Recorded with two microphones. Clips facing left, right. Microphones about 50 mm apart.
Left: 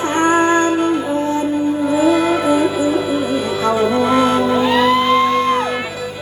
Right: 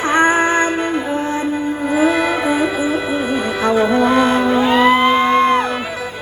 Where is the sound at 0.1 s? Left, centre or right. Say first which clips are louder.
Even; right.